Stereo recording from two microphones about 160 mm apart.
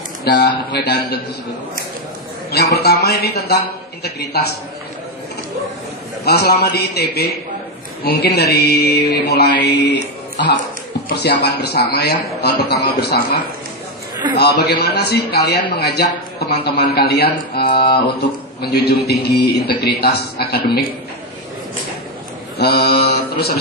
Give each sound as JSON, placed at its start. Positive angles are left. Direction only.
{"t": 0.3, "sound": "a man's voice", "side_deg": 90}
{"t": 2.7, "sound": "a man's voice", "side_deg": 85}
{"t": 6.2, "sound": "a man's voice", "side_deg": 85}
{"t": 14.3, "sound": "a man's voice", "side_deg": 90}
{"t": 17.6, "sound": "speech", "side_deg": 30}
{"t": 18.2, "sound": "a man's voice", "side_deg": 90}
{"t": 22.5, "sound": "mantra", "side_deg": 90}